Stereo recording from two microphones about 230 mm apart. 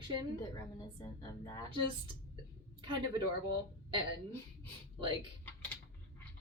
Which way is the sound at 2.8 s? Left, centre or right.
Right.